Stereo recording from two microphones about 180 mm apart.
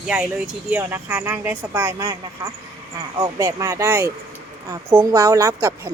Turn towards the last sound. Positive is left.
turn(degrees=-15)  # may be behind; listen again after turning